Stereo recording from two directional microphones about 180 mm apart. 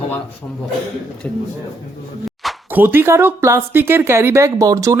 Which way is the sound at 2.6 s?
10° right (ahead or behind).